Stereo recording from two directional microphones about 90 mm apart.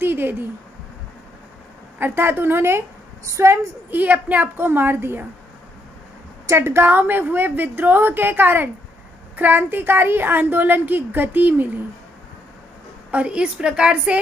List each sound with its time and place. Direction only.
0.0 s a sound: 25° right (ahead or behind)
2.0 s a woman's voice: 25° right (ahead or behind)
3.9 s a woman's voice: 20° right (ahead or behind)
6.4 s a woman's voice: 30° right (ahead or behind)
13.1 s a woman's voice: 15° right (ahead or behind)